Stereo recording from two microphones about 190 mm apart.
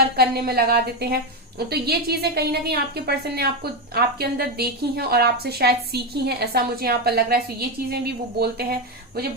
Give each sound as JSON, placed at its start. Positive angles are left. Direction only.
{"t": 0.2, "sound": "a woman's voice", "side_deg": -55}